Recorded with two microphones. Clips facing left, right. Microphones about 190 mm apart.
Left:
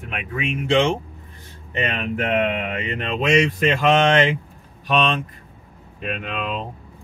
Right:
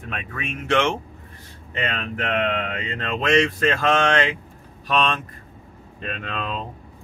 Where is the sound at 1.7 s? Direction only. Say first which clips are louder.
Left 3 dB; 20° left (ahead or behind).